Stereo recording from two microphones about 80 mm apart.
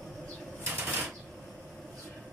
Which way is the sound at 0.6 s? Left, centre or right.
Right.